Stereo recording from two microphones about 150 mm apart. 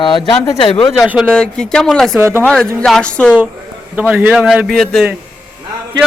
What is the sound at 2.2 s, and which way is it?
Speech, 15° right (ahead or behind).